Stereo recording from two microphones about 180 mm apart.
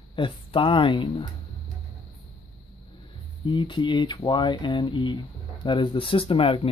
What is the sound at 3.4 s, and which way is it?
Speech, 25° left (ahead or behind).